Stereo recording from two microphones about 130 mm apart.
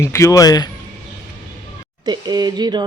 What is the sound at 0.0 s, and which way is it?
Speech, 20° left (ahead or behind).